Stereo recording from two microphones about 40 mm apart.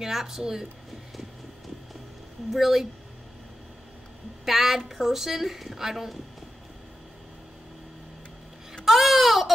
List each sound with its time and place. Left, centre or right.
0.0 s a woman's voice: centre
2.5 s speech: centre
4.5 s a woman's voice: centre
8.8 s baby cry: centre